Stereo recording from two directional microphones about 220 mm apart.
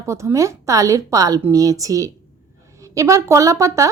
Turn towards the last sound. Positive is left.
turn(degrees=-15)  # may be behind; listen again after turning